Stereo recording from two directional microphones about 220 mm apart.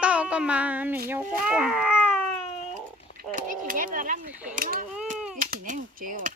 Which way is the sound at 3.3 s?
40° right (ahead or behind).